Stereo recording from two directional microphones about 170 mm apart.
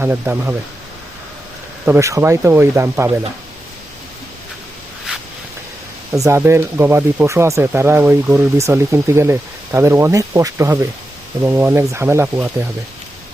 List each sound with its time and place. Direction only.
0.0 s speech: 15° right (ahead or behind)
1.8 s speech: 15° right (ahead or behind)
6.1 s speech: 15° right (ahead or behind)